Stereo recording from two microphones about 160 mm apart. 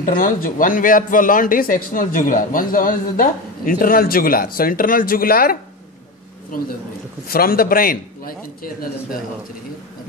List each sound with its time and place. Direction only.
0.0 s a man's voice: 60° left (ahead or behind)
7.2 s a man's voice: 65° left (ahead or behind)